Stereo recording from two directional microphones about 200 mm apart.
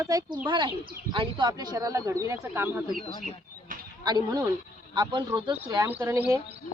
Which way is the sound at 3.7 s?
45° right (ahead or behind).